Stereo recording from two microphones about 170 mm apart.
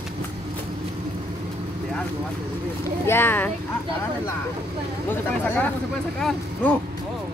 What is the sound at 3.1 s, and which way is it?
Speech, 15° left (ahead or behind).